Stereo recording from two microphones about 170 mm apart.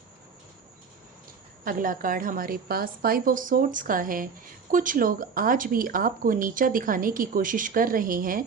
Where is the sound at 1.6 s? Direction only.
55° right (ahead or behind).